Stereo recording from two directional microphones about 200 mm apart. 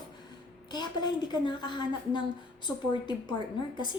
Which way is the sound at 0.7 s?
20° left (ahead or behind).